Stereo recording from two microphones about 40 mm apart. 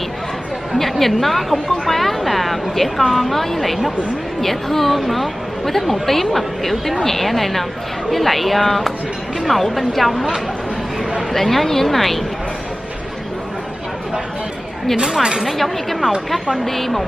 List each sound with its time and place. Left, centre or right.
0.7 s a woman's voice: centre
11.3 s a woman's voice: centre
15.0 s a woman's voice: centre
15.4 s a woman's voice: centre